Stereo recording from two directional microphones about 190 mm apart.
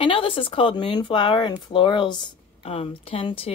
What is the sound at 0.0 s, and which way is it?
Speech, 25° left (ahead or behind).